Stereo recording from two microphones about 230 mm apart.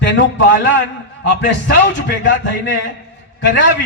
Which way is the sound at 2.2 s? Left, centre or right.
Left.